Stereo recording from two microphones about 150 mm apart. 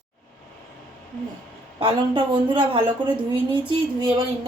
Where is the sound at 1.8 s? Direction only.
35° right (ahead or behind).